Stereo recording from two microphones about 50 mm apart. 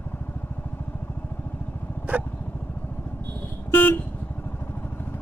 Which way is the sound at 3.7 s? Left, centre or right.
Left.